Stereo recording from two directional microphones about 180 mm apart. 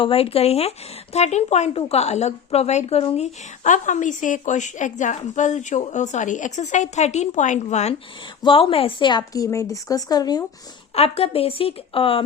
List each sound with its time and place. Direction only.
0.0 s a woman's voice: 30° left (ahead or behind)
10.9 s a woman's voice: 35° left (ahead or behind)